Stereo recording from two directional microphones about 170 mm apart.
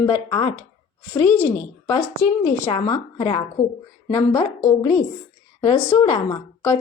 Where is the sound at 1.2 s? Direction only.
10° left (ahead or behind).